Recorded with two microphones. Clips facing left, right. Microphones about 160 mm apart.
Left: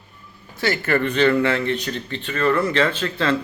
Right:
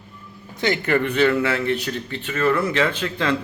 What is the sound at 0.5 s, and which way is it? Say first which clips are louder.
A man's voice: right 1 dB; 20° right (ahead or behind).